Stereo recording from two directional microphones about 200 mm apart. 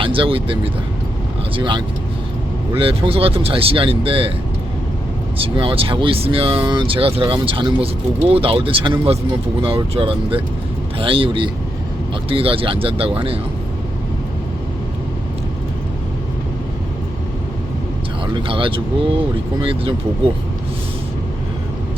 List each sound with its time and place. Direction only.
0.0 s speech: 25° right (ahead or behind)
5.4 s speech: 25° right (ahead or behind)
18.3 s speech: 25° right (ahead or behind)